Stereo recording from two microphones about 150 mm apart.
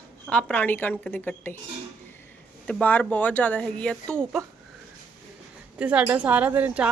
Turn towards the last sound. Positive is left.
turn(degrees=-10)  # may be behind; listen again after turning